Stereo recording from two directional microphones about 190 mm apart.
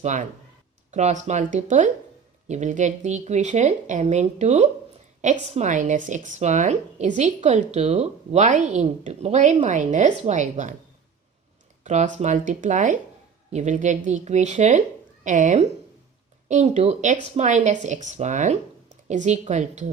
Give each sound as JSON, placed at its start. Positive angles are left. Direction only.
{"t": 0.0, "sound": "speech", "side_deg": -40}
{"t": 11.8, "sound": "speech", "side_deg": -40}